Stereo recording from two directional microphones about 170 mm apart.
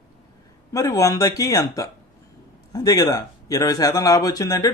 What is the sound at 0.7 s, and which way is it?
Speech, 20° left (ahead or behind).